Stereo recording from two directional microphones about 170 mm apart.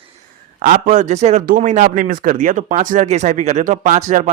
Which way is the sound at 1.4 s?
55° right (ahead or behind).